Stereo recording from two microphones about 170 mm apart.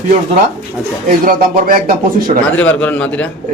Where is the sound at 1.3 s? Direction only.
60° right (ahead or behind).